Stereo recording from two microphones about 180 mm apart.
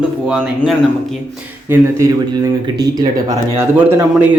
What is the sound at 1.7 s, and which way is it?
A man's voice, 15° right (ahead or behind).